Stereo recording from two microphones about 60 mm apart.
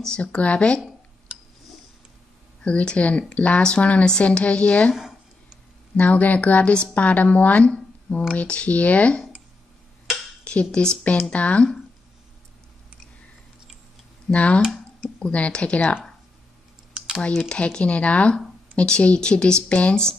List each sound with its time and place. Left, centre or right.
0.0 s speech: centre
1.3 s a sound: centre
2.6 s a woman's voice: centre
5.9 s a woman's voice: left
10.4 s a woman's voice: centre
14.3 s a woman's voice: left
16.9 s computer keyboard: centre
17.5 s a woman's voice: centre